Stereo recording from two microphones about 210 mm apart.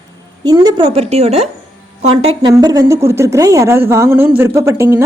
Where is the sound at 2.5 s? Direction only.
15° right (ahead or behind).